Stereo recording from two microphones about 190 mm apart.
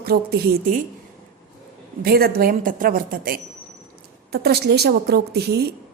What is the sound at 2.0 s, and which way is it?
A woman's voice, 55° right (ahead or behind).